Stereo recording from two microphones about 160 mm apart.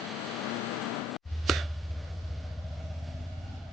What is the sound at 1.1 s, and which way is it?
Plop, centre (ahead or behind).